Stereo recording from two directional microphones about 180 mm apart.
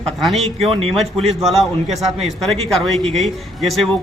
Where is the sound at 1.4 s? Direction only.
Centre (ahead or behind).